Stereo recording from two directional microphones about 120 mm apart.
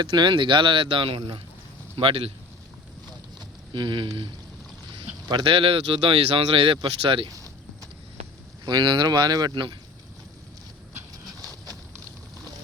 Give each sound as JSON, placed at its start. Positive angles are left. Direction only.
{"t": 0.0, "sound": "speech", "side_deg": -40}
{"t": 3.7, "sound": "speech", "side_deg": -40}
{"t": 5.3, "sound": "speech", "side_deg": -45}
{"t": 8.6, "sound": "speech", "side_deg": -40}
{"t": 11.4, "sound": "a sound", "side_deg": -30}